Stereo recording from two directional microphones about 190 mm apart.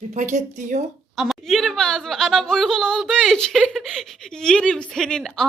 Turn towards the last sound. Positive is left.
turn(degrees=5)  # may be behind; listen again after turning